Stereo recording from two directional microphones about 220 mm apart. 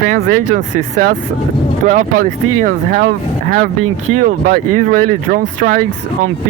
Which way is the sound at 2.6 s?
40° right (ahead or behind).